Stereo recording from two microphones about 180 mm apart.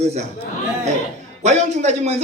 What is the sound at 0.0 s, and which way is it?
Speech, 35° right (ahead or behind).